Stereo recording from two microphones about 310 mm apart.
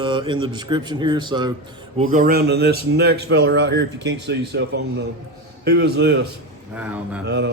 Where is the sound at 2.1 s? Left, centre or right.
Right.